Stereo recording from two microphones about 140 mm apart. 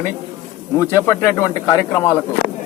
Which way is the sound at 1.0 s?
20° left (ahead or behind).